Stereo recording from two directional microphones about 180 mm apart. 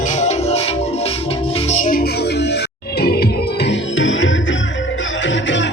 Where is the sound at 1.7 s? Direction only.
50° left (ahead or behind).